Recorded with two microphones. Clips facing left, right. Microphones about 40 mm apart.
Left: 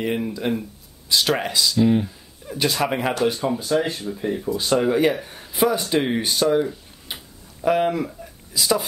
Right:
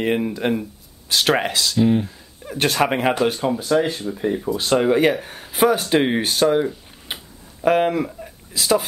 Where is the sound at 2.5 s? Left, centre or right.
Right.